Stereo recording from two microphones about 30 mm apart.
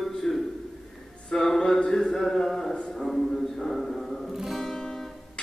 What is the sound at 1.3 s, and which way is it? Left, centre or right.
Music, centre.